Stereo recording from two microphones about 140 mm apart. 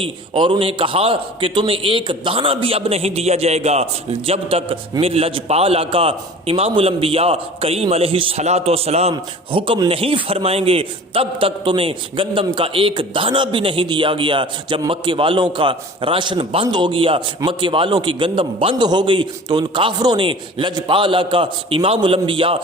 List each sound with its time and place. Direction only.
0.0 s a man's voice: 35° right (ahead or behind)